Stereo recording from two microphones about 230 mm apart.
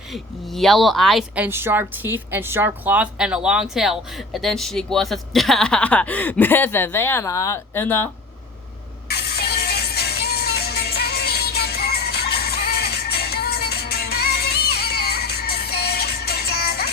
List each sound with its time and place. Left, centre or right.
0.1 s speech: centre
9.0 s music: left